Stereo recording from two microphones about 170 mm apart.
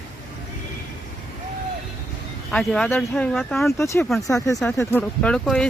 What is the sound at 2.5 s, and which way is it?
Speech, 5° left (ahead or behind).